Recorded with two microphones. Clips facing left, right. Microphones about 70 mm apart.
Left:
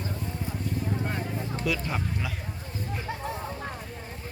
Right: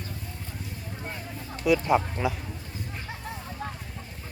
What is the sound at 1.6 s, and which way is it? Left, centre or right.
Speech, centre.